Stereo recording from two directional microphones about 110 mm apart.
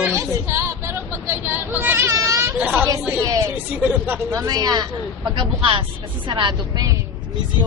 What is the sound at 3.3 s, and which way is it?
Speech, 30° right (ahead or behind).